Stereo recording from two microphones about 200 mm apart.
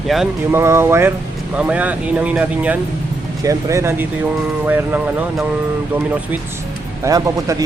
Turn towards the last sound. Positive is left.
turn(degrees=-15)  # may be behind; listen again after turning